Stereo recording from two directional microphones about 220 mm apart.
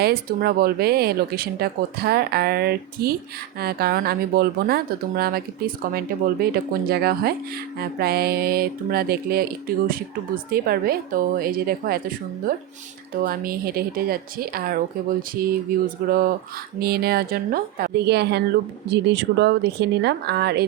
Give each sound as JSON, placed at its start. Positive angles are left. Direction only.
{"t": 0.0, "sound": "speech", "side_deg": -45}